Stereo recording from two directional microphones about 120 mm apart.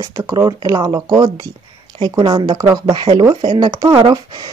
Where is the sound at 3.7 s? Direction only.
30° right (ahead or behind).